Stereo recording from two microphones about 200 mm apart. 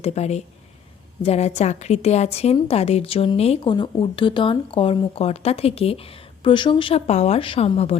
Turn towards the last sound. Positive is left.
turn(degrees=30)  # may be behind; listen again after turning